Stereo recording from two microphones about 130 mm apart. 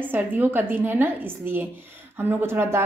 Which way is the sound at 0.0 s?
15° right (ahead or behind).